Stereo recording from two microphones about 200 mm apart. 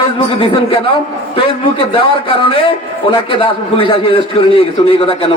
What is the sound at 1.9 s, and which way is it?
A man's voice, 25° left (ahead or behind).